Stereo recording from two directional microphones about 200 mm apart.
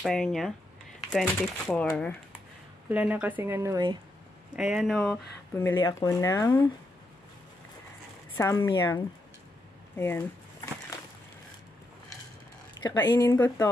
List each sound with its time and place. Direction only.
0.0 s speech: centre (ahead or behind)
2.9 s speech: 10° right (ahead or behind)
4.6 s speech: 5° right (ahead or behind); by 6.6 s 15° left (ahead or behind)
8.4 s speech: 15° left (ahead or behind)
9.9 s a sound: 10° left (ahead or behind)
12.8 s speech: 20° left (ahead or behind)